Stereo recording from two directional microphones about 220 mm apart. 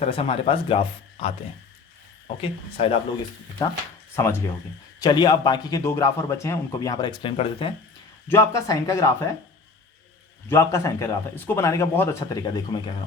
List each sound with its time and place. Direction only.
0.0 s speech: 25° left (ahead or behind)
4.1 s a man's voice: 10° left (ahead or behind)
8.3 s a man's voice: 15° left (ahead or behind)
10.5 s a man's voice: 15° left (ahead or behind)